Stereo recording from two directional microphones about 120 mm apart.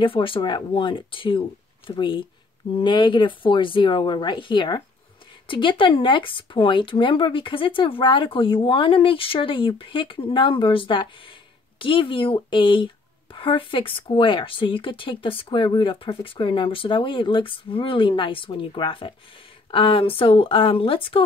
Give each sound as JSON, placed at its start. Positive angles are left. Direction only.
{"t": 0.0, "sound": "speech", "side_deg": 45}